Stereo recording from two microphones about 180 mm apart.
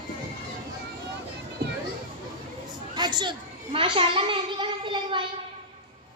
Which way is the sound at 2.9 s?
25° right (ahead or behind).